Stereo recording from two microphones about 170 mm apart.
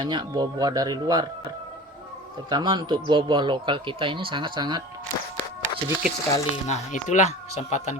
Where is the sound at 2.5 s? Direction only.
25° right (ahead or behind).